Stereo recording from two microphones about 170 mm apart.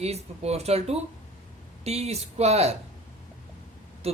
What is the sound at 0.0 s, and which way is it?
Speech, 40° right (ahead or behind).